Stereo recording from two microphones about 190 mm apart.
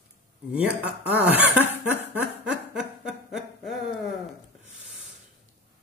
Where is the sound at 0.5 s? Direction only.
5° right (ahead or behind).